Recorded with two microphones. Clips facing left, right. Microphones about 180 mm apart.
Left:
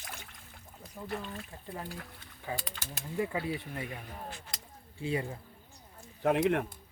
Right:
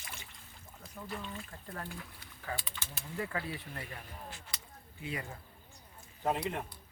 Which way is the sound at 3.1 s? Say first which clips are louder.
Left 5 dB; 20° left (ahead or behind).